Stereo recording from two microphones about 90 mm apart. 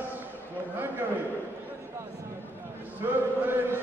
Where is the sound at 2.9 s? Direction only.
25° right (ahead or behind).